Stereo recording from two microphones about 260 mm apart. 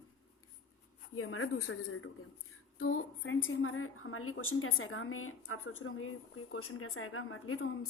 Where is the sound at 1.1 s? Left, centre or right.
Left.